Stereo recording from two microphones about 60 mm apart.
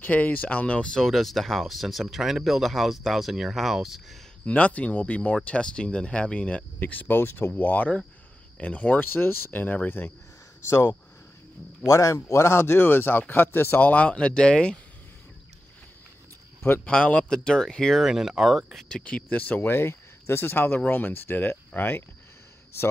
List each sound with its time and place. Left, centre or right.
0.0 s speech: left; by 4.2 s centre
4.5 s speech: left
9.0 s speech: left
10.7 s speech: left
11.8 s speech: left; by 14.8 s centre
16.8 s speech: left
17.2 s speech: centre
17.9 s speech: centre
18.9 s speech: centre
19.7 s speech: left